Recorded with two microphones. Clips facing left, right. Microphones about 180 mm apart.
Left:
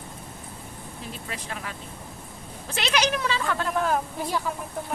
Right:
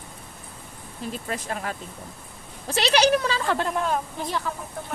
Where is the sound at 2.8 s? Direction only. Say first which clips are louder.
Right 5 dB; 35° right (ahead or behind).